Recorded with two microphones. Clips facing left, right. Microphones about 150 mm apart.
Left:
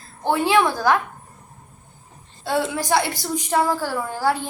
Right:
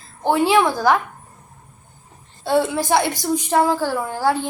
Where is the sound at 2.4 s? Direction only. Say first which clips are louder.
Right 4 dB; 15° right (ahead or behind).